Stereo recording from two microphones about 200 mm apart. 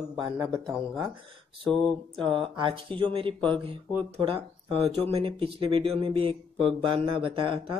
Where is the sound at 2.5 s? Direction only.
25° right (ahead or behind).